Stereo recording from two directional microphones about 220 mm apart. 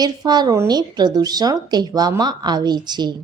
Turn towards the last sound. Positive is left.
turn(degrees=-20)  # may be behind; listen again after turning